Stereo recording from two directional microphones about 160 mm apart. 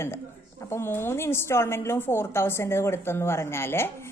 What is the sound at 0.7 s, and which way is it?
A woman's voice, 15° left (ahead or behind).